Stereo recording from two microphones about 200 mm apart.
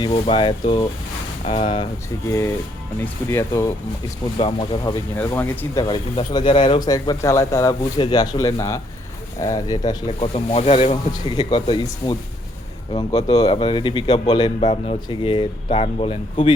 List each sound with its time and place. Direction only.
0.0 s speech: 25° left (ahead or behind)
4.4 s speech: 25° left (ahead or behind)
5.1 s speech: 10° left (ahead or behind)
5.9 s speech: 25° left (ahead or behind)
10.2 s speech: 30° left (ahead or behind)
14.6 s speech: 35° left (ahead or behind)